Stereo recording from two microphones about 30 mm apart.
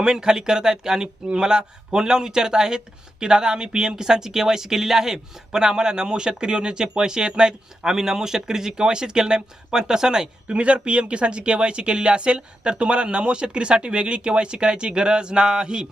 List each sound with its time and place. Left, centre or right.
0.0 s speech: right
10.5 s speech: right